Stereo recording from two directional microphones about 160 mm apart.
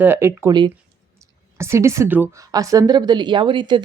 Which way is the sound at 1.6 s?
15° right (ahead or behind).